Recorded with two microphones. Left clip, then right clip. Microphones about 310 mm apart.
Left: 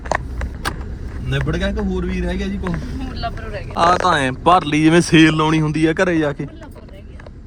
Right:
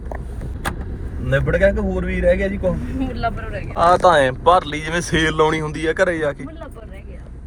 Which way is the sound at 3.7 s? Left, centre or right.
Centre.